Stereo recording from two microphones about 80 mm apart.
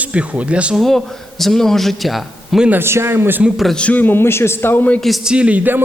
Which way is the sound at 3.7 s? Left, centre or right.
Centre.